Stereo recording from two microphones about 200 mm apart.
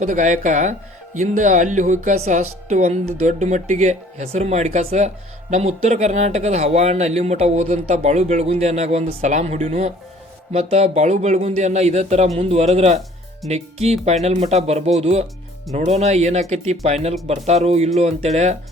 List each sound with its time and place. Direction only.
0.0 s speech: 40° right (ahead or behind)